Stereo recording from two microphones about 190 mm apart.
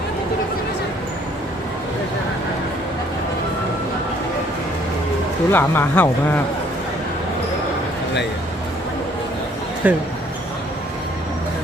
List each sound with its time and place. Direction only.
5.5 s speech: 10° left (ahead or behind)
9.8 s speech: 10° right (ahead or behind)